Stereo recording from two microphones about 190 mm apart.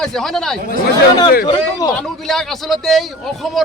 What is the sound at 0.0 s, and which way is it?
Speech, centre (ahead or behind).